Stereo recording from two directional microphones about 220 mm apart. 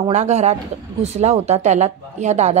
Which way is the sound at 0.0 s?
30° right (ahead or behind).